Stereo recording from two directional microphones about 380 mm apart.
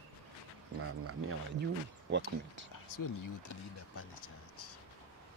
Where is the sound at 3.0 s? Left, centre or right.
Left.